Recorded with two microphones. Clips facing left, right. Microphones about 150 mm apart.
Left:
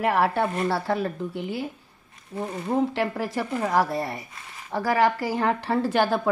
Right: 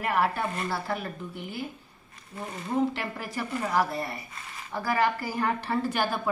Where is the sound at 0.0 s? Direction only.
80° left.